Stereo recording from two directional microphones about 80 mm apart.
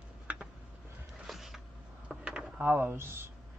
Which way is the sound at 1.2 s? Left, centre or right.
Centre.